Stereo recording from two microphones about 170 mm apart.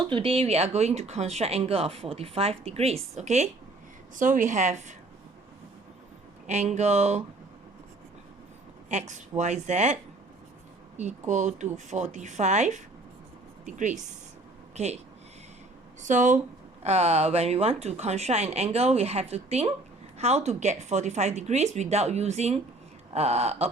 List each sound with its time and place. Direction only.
0.0 s a woman's voice: 30° right (ahead or behind)
6.5 s speech: 40° right (ahead or behind)
8.9 s a woman's voice: 45° right (ahead or behind)
16.0 s a woman's voice: 45° right (ahead or behind)